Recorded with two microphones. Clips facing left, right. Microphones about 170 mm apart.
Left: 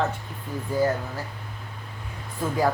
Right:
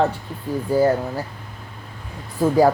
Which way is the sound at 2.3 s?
35° right (ahead or behind).